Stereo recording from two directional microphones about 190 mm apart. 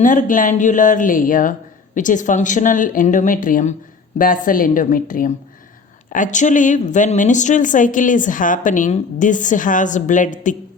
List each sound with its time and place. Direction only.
0.0 s speech: 45° left (ahead or behind)